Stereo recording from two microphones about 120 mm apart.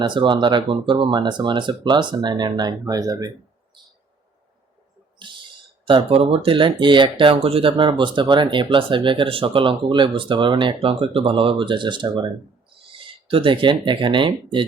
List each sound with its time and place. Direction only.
0.0 s speech: 40° right (ahead or behind)
5.3 s speech: 40° right (ahead or behind)